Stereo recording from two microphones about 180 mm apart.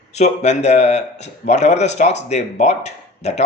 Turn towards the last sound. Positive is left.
turn(degrees=40)  # may be behind; listen again after turning